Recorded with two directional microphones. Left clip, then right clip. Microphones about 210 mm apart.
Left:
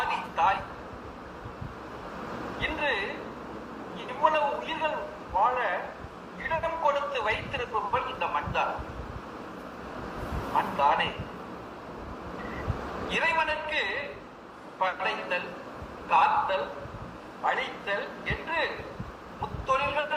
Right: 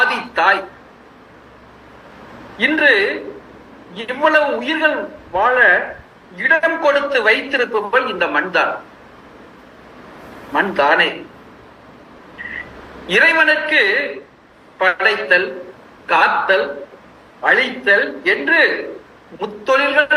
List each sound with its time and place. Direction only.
0.0 s a sound: 55° right (ahead or behind)
2.6 s a man's voice: 55° right (ahead or behind)
10.6 s a man's voice: 55° right (ahead or behind)
13.1 s a man's voice: 55° right (ahead or behind)